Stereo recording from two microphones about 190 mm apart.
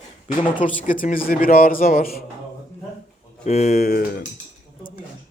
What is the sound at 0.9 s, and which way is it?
Speech, 45° left (ahead or behind).